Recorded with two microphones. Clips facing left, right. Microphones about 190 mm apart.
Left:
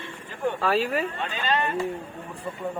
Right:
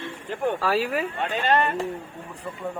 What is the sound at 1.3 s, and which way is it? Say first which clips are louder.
Speech: right 6 dB; 65° right (ahead or behind).